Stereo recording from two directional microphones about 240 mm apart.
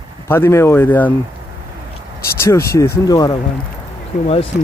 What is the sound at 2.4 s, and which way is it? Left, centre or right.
Speech, centre.